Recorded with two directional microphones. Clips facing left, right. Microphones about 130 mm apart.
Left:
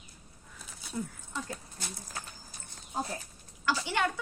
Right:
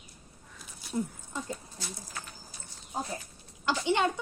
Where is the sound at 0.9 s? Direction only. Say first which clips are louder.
Right 4 dB; 20° right (ahead or behind).